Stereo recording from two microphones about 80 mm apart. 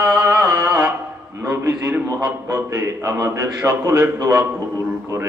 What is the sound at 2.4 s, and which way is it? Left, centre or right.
A man's voice, right.